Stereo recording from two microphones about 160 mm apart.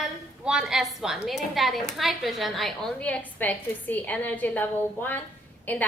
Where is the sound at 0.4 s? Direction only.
5° right (ahead or behind).